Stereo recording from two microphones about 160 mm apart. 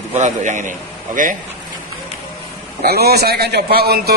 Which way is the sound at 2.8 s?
75° right (ahead or behind).